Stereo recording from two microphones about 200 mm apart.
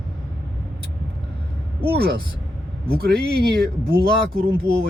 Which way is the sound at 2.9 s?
50° right (ahead or behind).